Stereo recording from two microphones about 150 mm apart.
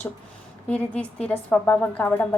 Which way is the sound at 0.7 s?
10° left (ahead or behind).